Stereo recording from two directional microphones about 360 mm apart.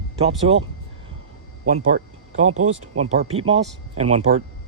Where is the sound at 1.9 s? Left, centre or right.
Centre.